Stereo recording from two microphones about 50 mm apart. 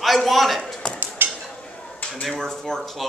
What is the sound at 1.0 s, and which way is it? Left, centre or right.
Stir, right.